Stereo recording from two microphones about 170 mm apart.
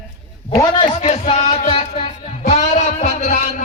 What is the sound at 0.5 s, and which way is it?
A man's voice, 25° left (ahead or behind).